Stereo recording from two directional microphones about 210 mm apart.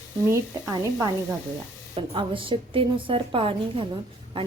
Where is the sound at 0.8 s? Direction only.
15° right (ahead or behind).